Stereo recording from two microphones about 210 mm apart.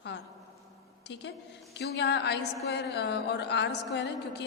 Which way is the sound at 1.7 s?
55° left (ahead or behind).